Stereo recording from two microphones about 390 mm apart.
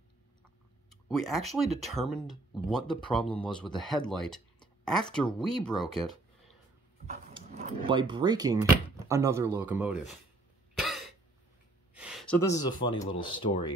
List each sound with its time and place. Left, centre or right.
0.8 s a sound: centre
1.5 s speech: centre
3.3 s speech: centre
3.7 s speech: centre
7.1 s a sound: centre
9.0 s speech: centre
10.8 s throat clearing: centre
11.9 s speech: centre